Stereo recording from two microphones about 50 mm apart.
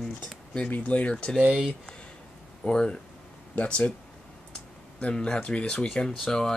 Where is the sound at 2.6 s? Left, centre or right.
Centre.